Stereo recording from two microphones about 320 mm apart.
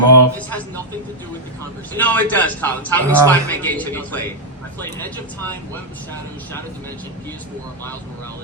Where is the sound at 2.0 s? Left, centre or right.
Centre.